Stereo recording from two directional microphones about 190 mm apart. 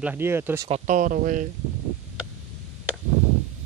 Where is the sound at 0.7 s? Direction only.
35° right (ahead or behind).